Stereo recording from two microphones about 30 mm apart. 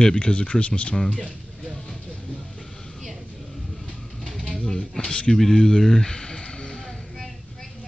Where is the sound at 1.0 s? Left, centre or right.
Left.